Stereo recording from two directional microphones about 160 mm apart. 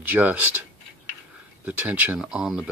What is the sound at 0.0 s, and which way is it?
Speech, 10° right (ahead or behind).